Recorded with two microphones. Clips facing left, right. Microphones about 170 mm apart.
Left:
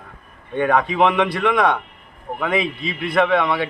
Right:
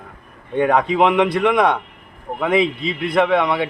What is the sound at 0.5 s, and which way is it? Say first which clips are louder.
A man's voice: right 2 dB; 15° right (ahead or behind).